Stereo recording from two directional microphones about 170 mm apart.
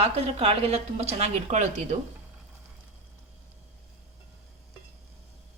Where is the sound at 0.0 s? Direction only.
40° right (ahead or behind).